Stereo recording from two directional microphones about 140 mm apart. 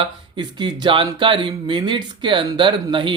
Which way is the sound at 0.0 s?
35° right (ahead or behind).